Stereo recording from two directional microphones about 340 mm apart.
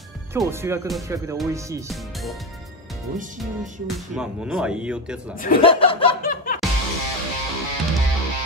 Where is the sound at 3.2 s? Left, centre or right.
Right.